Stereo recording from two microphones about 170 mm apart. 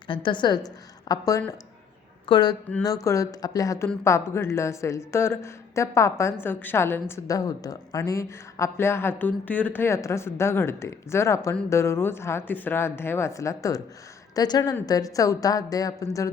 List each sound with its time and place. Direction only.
0.1 s a woman's voice: 30° left (ahead or behind)